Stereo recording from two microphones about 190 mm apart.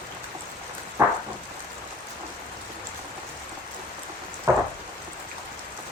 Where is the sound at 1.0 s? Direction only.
10° right (ahead or behind).